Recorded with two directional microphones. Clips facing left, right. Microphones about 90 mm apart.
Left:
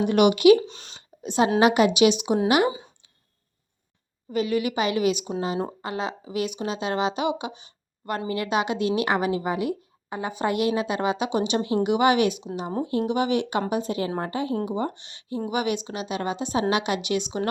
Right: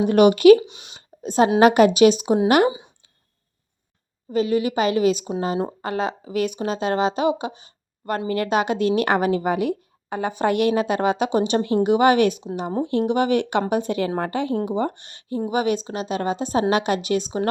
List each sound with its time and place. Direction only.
0.0 s a woman's voice: 40° right (ahead or behind)
0.6 s speech: 15° right (ahead or behind)
1.2 s a woman's voice: 40° right (ahead or behind)
2.5 s a woman's voice: 50° right (ahead or behind)
4.3 s a woman's voice: 30° right (ahead or behind)
5.8 s a woman's voice: 45° right (ahead or behind); by 14.5 s 65° right (ahead or behind)
14.6 s a woman's voice: 50° right (ahead or behind)
15.4 s a woman's voice: 35° right (ahead or behind)